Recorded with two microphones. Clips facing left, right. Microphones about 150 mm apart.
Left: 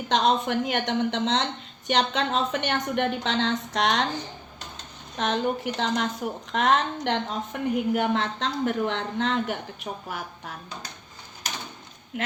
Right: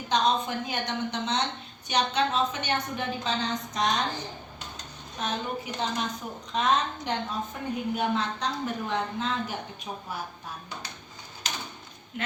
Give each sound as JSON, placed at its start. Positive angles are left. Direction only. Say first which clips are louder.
{"t": 0.1, "sound": "a woman's voice", "louder": "left 3 dB", "side_deg": 90}
{"t": 5.1, "sound": "a woman's voice", "louder": "left 6 dB", "side_deg": 90}